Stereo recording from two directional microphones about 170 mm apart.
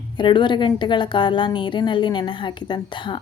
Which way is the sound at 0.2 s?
25° left (ahead or behind).